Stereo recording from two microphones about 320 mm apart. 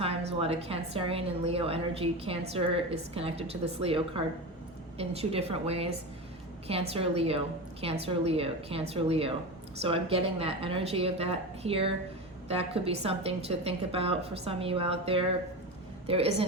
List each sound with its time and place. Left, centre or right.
0.0 s a woman's voice: centre